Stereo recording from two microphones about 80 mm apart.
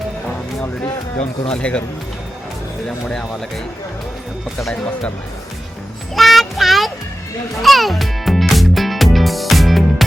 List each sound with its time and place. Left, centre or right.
1.5 s speech: centre
6.1 s child singing: centre
7.6 s music: centre